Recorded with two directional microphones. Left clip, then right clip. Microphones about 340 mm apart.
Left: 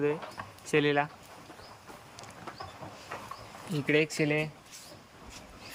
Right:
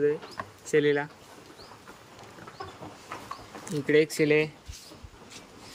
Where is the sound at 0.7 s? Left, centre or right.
Centre.